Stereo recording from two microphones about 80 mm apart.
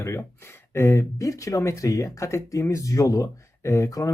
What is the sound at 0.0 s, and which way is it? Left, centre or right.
Speech, left.